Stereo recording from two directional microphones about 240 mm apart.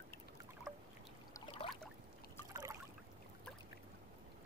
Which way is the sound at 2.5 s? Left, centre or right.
Centre.